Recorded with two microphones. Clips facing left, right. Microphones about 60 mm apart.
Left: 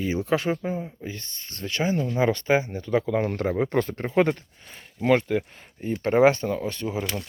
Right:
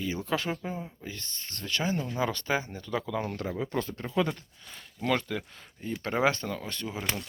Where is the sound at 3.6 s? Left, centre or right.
Left.